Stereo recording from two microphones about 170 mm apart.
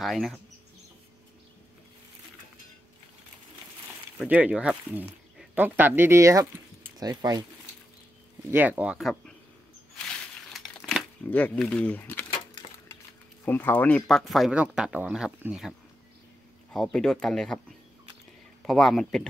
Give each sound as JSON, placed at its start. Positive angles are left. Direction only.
{"t": 0.0, "sound": "speech", "side_deg": 0}
{"t": 4.2, "sound": "speech", "side_deg": -5}
{"t": 8.5, "sound": "speech", "side_deg": -10}
{"t": 10.0, "sound": "crumpling", "side_deg": 0}
{"t": 11.2, "sound": "speech", "side_deg": 10}
{"t": 13.5, "sound": "speech", "side_deg": 10}
{"t": 16.7, "sound": "speech", "side_deg": 5}
{"t": 18.7, "sound": "speech", "side_deg": 0}